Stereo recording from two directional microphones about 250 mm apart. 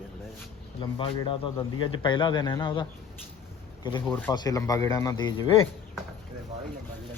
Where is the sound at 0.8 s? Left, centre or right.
Centre.